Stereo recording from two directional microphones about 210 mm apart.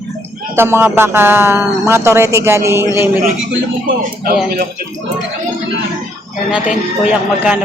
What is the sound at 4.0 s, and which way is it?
Speech, 45° right (ahead or behind).